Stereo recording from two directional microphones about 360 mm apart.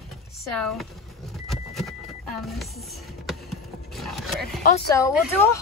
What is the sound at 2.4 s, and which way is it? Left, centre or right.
Speech, centre.